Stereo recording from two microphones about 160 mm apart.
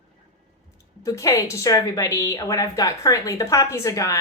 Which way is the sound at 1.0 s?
20° left (ahead or behind).